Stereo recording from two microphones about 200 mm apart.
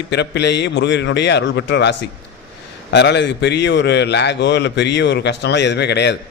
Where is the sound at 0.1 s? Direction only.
55° left (ahead or behind).